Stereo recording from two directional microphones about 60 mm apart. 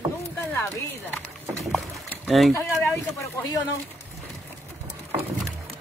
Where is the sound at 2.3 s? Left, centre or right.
Centre.